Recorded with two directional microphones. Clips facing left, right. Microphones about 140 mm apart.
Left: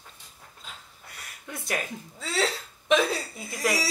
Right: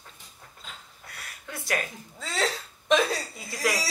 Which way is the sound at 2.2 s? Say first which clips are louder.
Left 1 dB; 5° left (ahead or behind).